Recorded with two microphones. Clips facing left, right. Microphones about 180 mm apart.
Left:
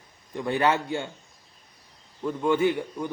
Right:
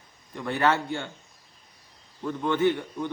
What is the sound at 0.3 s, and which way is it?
Speech, 15° left (ahead or behind).